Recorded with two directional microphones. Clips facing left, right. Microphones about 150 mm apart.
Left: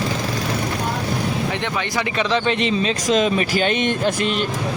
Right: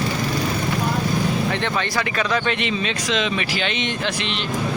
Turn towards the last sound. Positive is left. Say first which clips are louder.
# left 5 dB
turn(degrees=45)  # may be behind; listen again after turning